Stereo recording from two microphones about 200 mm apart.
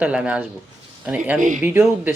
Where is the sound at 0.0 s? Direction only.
5° right (ahead or behind).